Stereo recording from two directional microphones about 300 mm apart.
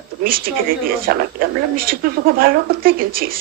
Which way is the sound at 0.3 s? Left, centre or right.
Right.